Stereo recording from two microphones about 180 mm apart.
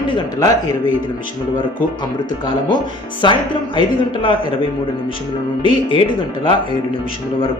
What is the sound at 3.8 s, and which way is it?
Speech, 25° left (ahead or behind).